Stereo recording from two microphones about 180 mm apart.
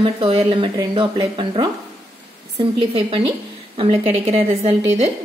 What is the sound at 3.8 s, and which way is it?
A woman's voice, 30° right (ahead or behind).